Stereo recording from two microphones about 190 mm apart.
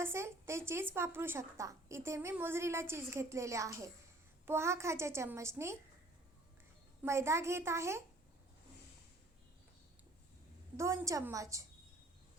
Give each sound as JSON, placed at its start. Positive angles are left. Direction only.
{"t": 0.0, "sound": "a woman's voice", "side_deg": -15}
{"t": 7.0, "sound": "a woman's voice", "side_deg": -15}
{"t": 10.8, "sound": "a woman's voice", "side_deg": -15}